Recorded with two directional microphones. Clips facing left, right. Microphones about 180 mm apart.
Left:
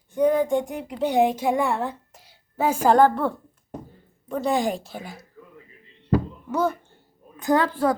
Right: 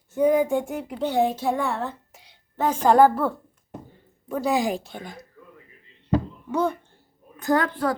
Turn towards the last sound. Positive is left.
turn(degrees=25)  # may be behind; listen again after turning